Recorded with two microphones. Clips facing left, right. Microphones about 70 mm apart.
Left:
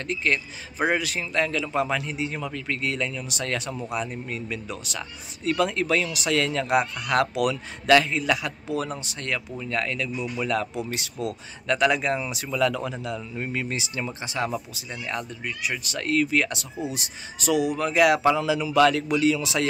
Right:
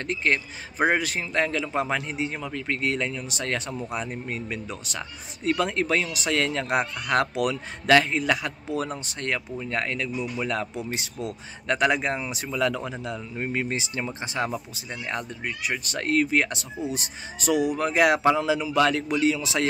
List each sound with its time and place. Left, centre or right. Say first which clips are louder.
0.0 s speech: right 1 dB; right